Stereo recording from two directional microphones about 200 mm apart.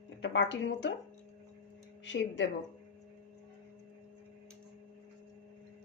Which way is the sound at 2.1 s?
60° left (ahead or behind).